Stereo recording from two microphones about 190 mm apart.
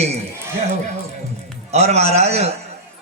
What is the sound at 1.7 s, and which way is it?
Speech, 35° right (ahead or behind).